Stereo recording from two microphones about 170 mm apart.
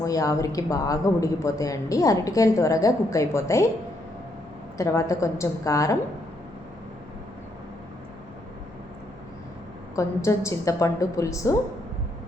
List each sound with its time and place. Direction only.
0.0 s a woman's voice: 20° left (ahead or behind)
4.8 s a woman's voice: 20° left (ahead or behind)
9.9 s a woman's voice: 20° left (ahead or behind)